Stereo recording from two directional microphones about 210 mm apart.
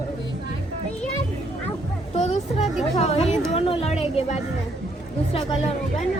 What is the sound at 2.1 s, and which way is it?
Music, 30° left (ahead or behind).